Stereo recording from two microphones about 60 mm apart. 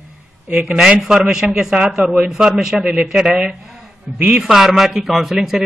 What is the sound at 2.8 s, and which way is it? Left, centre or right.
A man's voice, centre.